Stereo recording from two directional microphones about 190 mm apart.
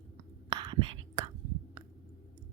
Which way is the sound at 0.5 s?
25° right (ahead or behind).